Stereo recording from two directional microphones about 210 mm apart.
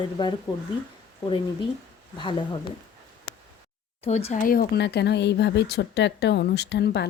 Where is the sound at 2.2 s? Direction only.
20° left (ahead or behind).